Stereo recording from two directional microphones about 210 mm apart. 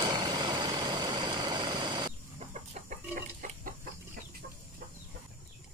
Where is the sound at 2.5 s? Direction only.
35° right (ahead or behind).